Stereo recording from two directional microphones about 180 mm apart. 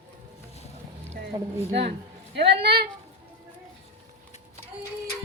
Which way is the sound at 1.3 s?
25° right (ahead or behind).